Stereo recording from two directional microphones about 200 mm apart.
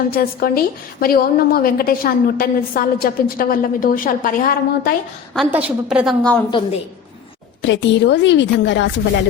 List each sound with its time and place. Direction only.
0.1 s a woman's voice: 45° left (ahead or behind)
5.3 s a woman's voice: 5° right (ahead or behind)
7.6 s a woman's voice: 65° left (ahead or behind)